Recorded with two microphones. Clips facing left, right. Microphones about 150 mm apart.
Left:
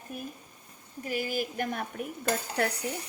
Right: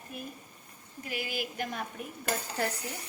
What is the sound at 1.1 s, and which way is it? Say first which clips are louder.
Speech: left 5 dB; 45° left (ahead or behind).